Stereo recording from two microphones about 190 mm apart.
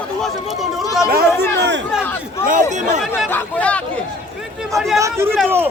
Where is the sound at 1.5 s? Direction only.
65° right (ahead or behind).